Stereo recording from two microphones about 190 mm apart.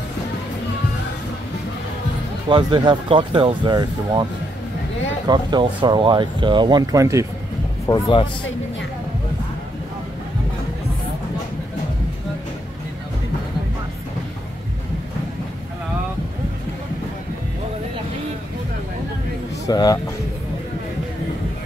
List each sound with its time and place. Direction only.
2.5 s speech: 25° right (ahead or behind)
5.3 s speech: 25° right (ahead or behind)
7.8 s speech: 25° left (ahead or behind)
19.6 s speech: 20° left (ahead or behind)